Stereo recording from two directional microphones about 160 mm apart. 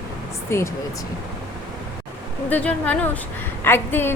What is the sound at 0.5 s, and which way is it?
Speech, 15° left (ahead or behind).